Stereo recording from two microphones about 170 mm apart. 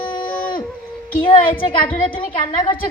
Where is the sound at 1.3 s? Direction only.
30° left (ahead or behind).